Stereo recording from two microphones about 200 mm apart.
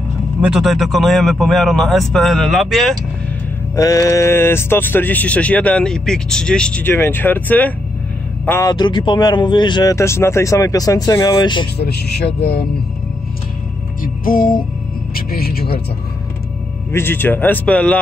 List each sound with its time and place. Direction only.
0.4 s speech: 5° right (ahead or behind)
3.7 s speech: 15° left (ahead or behind)
11.8 s music: 55° left (ahead or behind)
14.0 s music: 45° left (ahead or behind)
16.9 s speech: 10° left (ahead or behind)